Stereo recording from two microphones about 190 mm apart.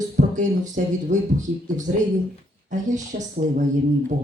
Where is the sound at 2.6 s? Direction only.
40° right (ahead or behind).